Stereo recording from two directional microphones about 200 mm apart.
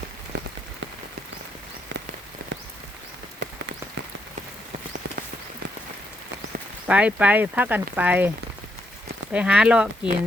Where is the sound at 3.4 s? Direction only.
60° right (ahead or behind).